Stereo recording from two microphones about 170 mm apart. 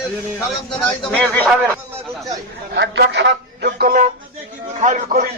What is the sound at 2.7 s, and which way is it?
Speech, 90° right.